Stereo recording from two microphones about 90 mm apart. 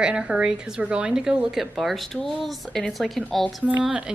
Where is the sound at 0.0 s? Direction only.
10° right (ahead or behind).